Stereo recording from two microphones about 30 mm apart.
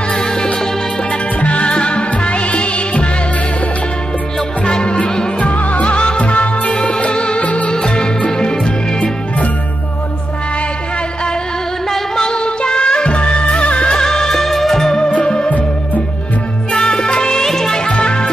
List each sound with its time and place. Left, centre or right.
0.1 s music: left
1.4 s music: left
4.6 s music: left
5.4 s music: left
7.0 s music: left
7.4 s music: left
7.7 s music: left
12.2 s music: left
13.9 s music: left
14.3 s music: centre
15.2 s music: left
16.7 s music: left
17.4 s music: centre
17.8 s music: left